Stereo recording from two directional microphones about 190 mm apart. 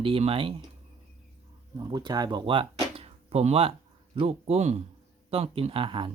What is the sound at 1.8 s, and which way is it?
Speech, 20° right (ahead or behind).